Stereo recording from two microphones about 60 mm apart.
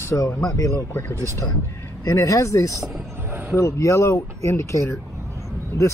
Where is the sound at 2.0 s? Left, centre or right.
Left.